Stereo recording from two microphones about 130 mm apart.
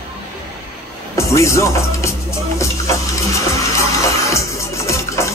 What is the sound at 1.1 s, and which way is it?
Music, 20° left (ahead or behind).